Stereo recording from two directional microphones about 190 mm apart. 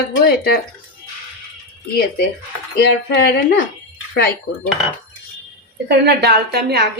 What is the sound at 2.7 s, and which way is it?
Speech, 55° left (ahead or behind).